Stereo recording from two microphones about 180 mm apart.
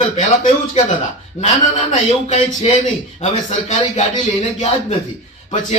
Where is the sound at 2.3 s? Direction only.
35° left (ahead or behind).